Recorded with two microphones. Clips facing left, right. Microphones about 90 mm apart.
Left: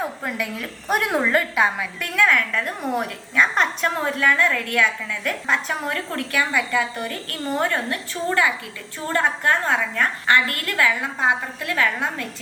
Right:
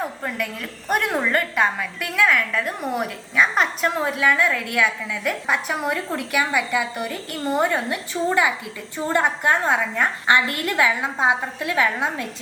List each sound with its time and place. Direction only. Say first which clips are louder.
0.0 s a woman's voice: even; 5° left (ahead or behind); by 12.3 s 20° right (ahead or behind)